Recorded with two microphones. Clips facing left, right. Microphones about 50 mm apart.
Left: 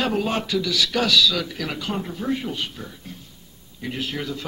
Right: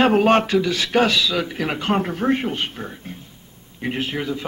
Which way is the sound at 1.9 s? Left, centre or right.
Right.